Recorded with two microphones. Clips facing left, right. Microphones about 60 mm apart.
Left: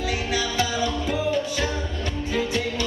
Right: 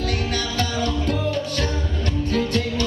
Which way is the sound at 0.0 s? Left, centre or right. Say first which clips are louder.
Even; centre.